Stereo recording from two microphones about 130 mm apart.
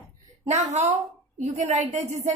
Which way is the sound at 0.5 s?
60° right (ahead or behind).